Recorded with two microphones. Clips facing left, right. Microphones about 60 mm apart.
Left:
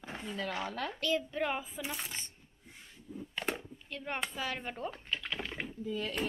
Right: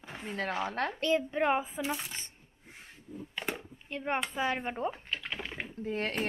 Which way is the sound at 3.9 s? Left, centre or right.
Right.